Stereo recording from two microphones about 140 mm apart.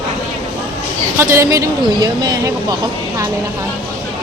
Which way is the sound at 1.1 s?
20° right (ahead or behind).